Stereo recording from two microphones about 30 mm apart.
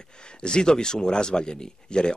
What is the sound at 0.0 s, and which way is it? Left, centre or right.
Speech, left.